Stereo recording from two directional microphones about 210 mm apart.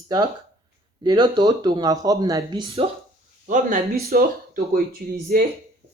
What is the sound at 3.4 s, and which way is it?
Speech, 40° right (ahead or behind).